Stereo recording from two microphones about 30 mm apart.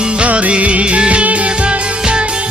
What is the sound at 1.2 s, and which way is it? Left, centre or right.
Music, right.